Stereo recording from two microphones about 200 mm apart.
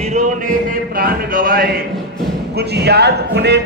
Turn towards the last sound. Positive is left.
turn(degrees=-60)  # may be behind; listen again after turning